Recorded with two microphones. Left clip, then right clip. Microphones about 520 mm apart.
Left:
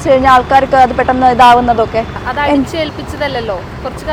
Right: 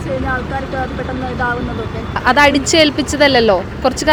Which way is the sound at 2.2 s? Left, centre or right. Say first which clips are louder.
Right 5 dB; right.